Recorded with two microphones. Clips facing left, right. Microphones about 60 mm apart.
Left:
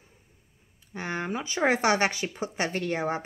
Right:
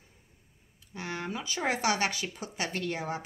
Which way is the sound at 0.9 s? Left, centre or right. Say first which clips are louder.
Left 5 dB; left.